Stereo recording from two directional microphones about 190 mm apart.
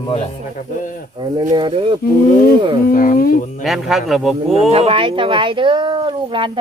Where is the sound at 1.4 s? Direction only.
25° right (ahead or behind).